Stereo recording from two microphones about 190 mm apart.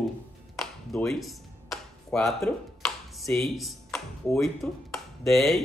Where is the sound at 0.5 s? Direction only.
5° left (ahead or behind).